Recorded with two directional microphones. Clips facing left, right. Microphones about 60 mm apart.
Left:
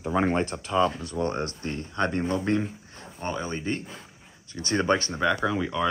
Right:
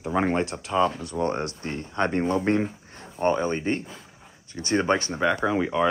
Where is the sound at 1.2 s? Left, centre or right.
Centre.